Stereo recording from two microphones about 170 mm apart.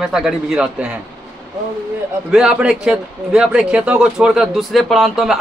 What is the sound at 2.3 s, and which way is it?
A man's voice, 5° right (ahead or behind).